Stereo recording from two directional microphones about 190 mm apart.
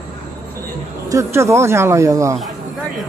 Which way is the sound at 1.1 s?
15° right (ahead or behind).